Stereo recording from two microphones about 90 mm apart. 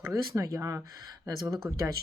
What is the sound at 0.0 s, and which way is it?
Speech, 35° right (ahead or behind).